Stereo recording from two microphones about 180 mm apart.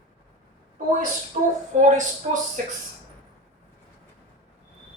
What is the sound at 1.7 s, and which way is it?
Speech, 45° right (ahead or behind).